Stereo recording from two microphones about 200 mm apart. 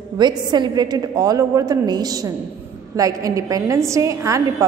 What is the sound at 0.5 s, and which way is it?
A woman's voice, 20° right (ahead or behind).